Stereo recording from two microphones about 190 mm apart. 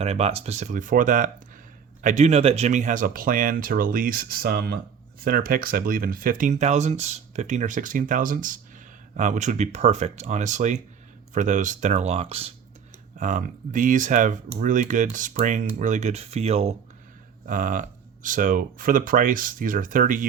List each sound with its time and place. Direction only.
0.0 s speech: 35° right (ahead or behind)
13.1 s speech: 40° right (ahead or behind)